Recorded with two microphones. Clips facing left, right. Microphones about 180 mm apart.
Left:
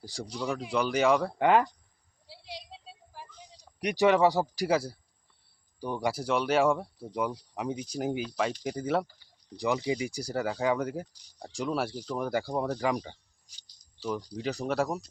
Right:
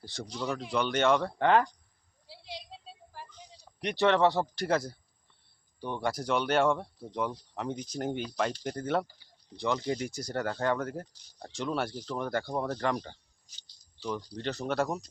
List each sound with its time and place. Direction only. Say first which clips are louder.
0.1 s speech: left 1 dB; 10° left (ahead or behind)
2.2 s a sound: even; 5° left (ahead or behind)
5.8 s speech: left 2 dB; 10° left (ahead or behind)